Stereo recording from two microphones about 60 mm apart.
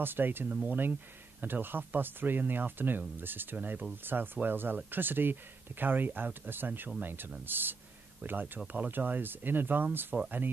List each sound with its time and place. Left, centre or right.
0.0 s speech: right